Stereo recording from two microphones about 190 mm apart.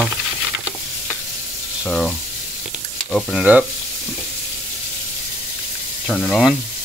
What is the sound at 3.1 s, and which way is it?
Speech, centre (ahead or behind).